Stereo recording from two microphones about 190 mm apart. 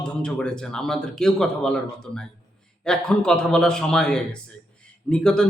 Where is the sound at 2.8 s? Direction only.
5° left (ahead or behind).